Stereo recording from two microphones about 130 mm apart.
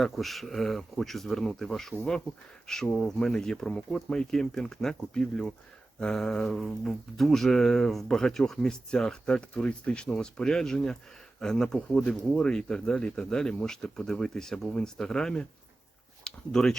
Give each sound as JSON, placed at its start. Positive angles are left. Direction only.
{"t": 0.0, "sound": "speech", "side_deg": 0}